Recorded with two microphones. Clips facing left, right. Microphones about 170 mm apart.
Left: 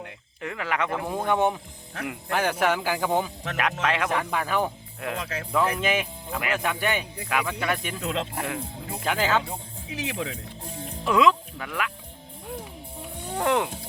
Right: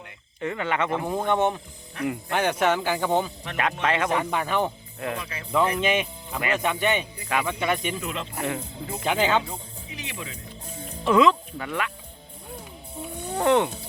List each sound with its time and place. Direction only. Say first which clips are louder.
0.4 s speech: right 2 dB; centre (ahead or behind)
1.3 s speech: left 1 dB; 10° left (ahead or behind)
5.1 s speech: left 2 dB; 80° left
5.5 s speech: right 2 dB; centre (ahead or behind)
8.0 s speech: left 3 dB; 75° left (ahead or behind)
9.0 s speech: right 2 dB; centre (ahead or behind)
9.9 s speech: left 7 dB; 90° left
11.0 s speech: right 2 dB; centre (ahead or behind)
13.3 s speech: right 3 dB; centre (ahead or behind)